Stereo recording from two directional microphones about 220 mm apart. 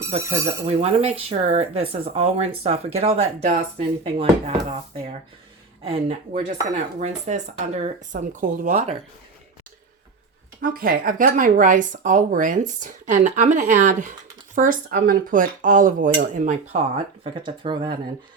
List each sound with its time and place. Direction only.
0.1 s speech: 30° right (ahead or behind)
10.6 s speech: 40° right (ahead or behind)
17.2 s speech: 20° right (ahead or behind)